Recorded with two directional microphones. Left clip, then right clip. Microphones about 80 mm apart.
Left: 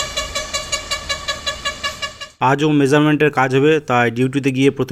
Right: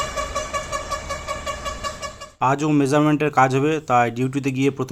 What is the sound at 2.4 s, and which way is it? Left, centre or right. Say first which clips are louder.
Speech: left 4 dB; left.